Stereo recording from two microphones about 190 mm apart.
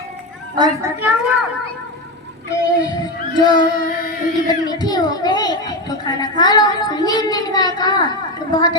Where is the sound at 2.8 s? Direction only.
20° left (ahead or behind).